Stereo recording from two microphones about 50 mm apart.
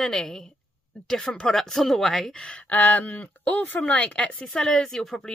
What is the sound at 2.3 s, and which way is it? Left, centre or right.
Speech, left.